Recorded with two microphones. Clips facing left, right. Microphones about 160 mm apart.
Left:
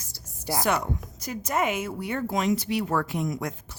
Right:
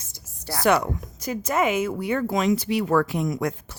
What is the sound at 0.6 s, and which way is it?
Speech, 85° right.